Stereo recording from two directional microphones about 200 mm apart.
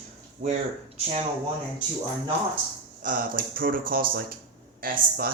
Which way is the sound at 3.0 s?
45° right (ahead or behind).